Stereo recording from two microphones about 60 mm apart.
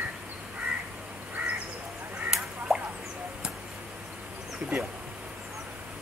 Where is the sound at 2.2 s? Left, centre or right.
Centre.